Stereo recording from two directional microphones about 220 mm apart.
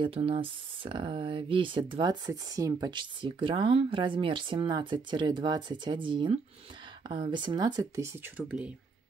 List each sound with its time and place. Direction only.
0.0 s speech: 25° right (ahead or behind); by 8.7 s 5° right (ahead or behind)